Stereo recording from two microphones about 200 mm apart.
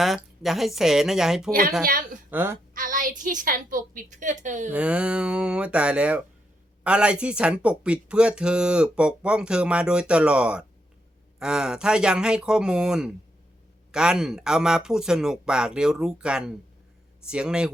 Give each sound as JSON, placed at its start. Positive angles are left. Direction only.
{"t": 0.0, "sound": "speech", "side_deg": 0}
{"t": 1.8, "sound": "a woman's voice", "side_deg": -45}
{"t": 2.3, "sound": "speech", "side_deg": -10}
{"t": 2.7, "sound": "a woman's voice", "side_deg": -45}
{"t": 4.7, "sound": "speech", "side_deg": -5}